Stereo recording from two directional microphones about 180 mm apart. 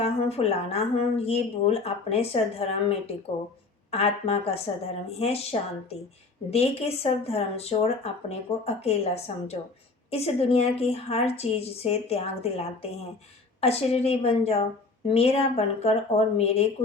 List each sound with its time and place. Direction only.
0.0 s speech: 35° left (ahead or behind)